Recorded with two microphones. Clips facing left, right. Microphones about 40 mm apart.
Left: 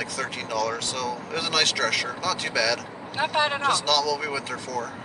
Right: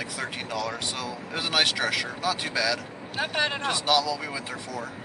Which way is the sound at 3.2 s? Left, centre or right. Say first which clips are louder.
Left 3 dB; centre.